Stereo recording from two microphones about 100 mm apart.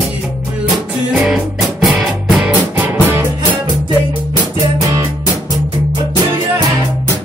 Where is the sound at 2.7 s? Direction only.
20° right (ahead or behind).